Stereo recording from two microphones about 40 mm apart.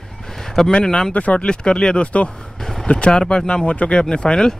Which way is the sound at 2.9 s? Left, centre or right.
Left.